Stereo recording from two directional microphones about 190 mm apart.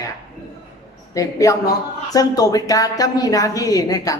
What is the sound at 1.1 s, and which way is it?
A woman's voice, 15° left (ahead or behind).